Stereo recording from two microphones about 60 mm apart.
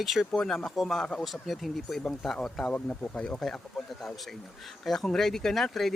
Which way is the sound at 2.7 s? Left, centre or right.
Left.